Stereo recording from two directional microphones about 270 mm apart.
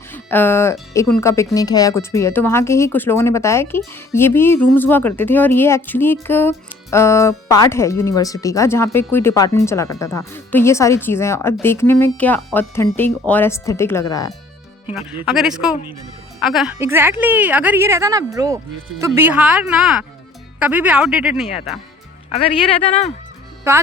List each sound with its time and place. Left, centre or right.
0.1 s speech: centre
15.3 s speech: centre
22.3 s speech: left